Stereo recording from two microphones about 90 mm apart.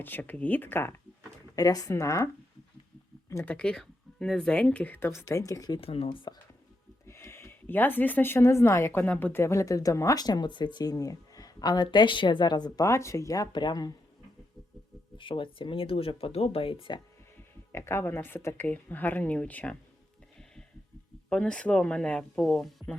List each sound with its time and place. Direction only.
0.0 s a woman's voice: 20° left (ahead or behind)
1.5 s speech: 40° left (ahead or behind)
3.4 s speech: 15° left (ahead or behind)
5.2 s speech: 40° left (ahead or behind)
5.8 s speech: 90° left
7.1 s speech: 30° left (ahead or behind); by 10.9 s 55° left (ahead or behind)
10.9 s speech: 40° left (ahead or behind)
12.8 s speech: 30° left (ahead or behind)
13.5 s speech: 55° left (ahead or behind)
15.2 s speech: 70° left (ahead or behind)
17.7 s a woman's voice: 30° left (ahead or behind)
21.2 s speech: 10° left (ahead or behind)